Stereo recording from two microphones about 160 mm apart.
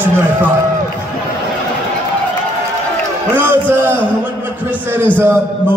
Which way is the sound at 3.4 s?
15° right (ahead or behind).